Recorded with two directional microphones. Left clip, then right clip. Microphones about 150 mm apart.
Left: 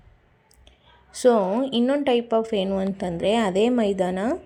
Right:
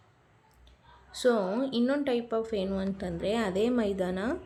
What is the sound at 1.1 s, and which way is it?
A woman's voice, 35° left (ahead or behind).